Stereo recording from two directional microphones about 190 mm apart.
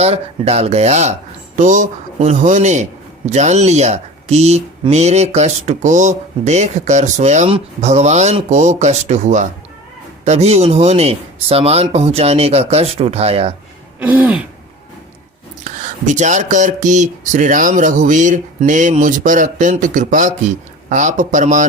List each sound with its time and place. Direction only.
0.0 s speech: 35° right (ahead or behind)
14.0 s throat clearing: 10° right (ahead or behind)
15.6 s speech: 40° right (ahead or behind)